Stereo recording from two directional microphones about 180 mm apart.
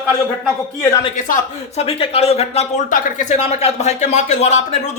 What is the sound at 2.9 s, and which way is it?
Speech, 45° left (ahead or behind).